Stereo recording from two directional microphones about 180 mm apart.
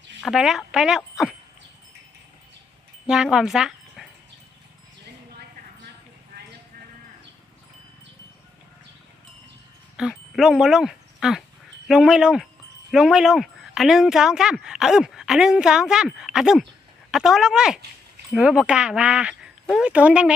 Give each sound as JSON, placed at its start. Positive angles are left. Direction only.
{"t": 0.2, "sound": "speech", "side_deg": 0}
{"t": 3.1, "sound": "speech", "side_deg": -5}
{"t": 6.3, "sound": "clip-clop", "side_deg": -60}
{"t": 10.0, "sound": "speech", "side_deg": 0}